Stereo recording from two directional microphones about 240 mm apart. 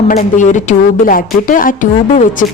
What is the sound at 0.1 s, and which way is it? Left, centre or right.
Speech, left.